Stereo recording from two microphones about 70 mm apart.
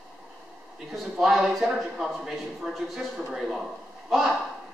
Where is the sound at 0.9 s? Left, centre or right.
Centre.